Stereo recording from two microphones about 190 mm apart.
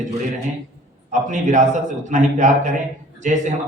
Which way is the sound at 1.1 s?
40° right (ahead or behind).